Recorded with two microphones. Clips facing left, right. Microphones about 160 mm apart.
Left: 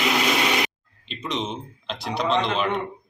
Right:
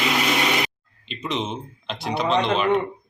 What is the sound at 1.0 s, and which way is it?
Speech, 5° right (ahead or behind).